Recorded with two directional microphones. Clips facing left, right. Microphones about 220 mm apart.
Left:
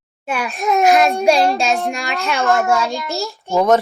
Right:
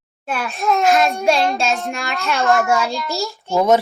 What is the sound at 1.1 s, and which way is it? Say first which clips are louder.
Child singing: left 3 dB; 30° left (ahead or behind).